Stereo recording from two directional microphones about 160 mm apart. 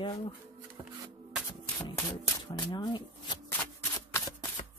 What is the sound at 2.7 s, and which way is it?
Speech, 25° left (ahead or behind).